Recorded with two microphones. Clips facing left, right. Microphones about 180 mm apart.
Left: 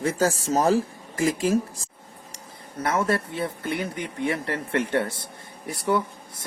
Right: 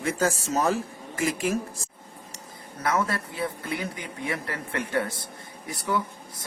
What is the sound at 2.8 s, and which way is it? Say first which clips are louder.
Speech: left 3 dB; 30° left (ahead or behind).